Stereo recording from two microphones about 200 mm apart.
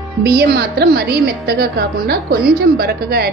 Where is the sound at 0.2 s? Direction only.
50° right (ahead or behind).